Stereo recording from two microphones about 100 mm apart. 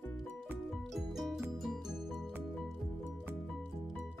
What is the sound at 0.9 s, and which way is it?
Music, 5° right (ahead or behind).